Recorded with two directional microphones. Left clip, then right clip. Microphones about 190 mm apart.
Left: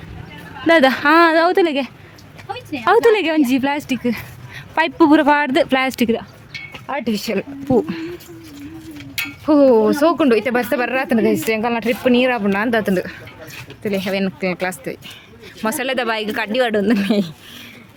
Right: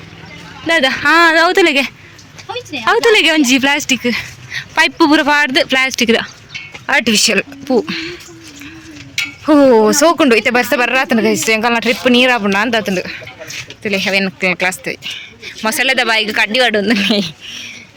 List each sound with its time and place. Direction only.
0.7 s speech: 25° left (ahead or behind)
1.0 s speech: 10° left (ahead or behind)
2.5 s a sound: 25° right (ahead or behind)
2.8 s speech: 10° left (ahead or behind)
6.8 s speech: 15° right (ahead or behind)
7.8 s speech: 10° left (ahead or behind)
9.5 s speech: 10° right (ahead or behind)
12.7 s speech: 15° left (ahead or behind)
13.8 s speech: centre (ahead or behind)